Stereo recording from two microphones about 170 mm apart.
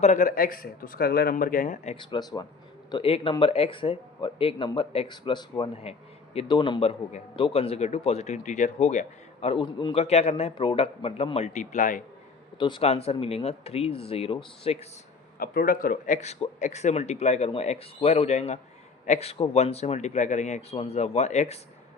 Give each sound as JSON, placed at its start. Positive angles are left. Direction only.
{"t": 0.0, "sound": "speech", "side_deg": 50}
{"t": 2.0, "sound": "speech", "side_deg": 25}
{"t": 12.5, "sound": "speech", "side_deg": 30}
{"t": 15.4, "sound": "speech", "side_deg": 60}